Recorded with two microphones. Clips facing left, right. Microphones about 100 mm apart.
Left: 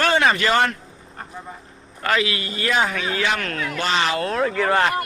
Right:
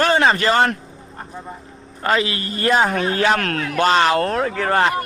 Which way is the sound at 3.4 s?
65° right (ahead or behind).